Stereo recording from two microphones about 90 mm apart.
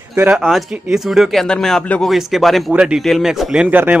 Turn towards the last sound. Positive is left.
turn(degrees=-20)  # may be behind; listen again after turning